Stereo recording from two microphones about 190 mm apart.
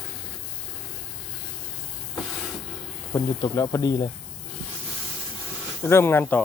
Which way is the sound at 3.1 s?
15° left (ahead or behind).